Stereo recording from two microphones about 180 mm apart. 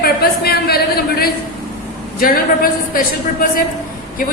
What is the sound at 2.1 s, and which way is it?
Speech, 55° left (ahead or behind).